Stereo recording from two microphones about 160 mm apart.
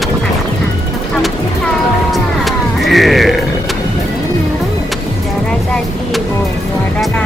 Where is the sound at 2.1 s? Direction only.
Centre (ahead or behind).